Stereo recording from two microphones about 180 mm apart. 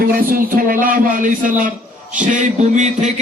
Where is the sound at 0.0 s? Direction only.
55° right (ahead or behind).